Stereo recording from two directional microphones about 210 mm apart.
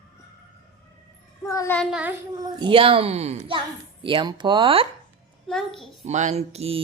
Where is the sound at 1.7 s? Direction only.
5° right (ahead or behind).